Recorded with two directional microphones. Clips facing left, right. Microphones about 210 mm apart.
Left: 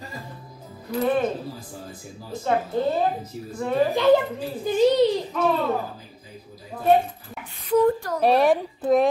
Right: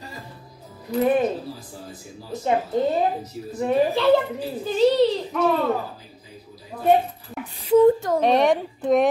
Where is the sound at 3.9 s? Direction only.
15° left (ahead or behind).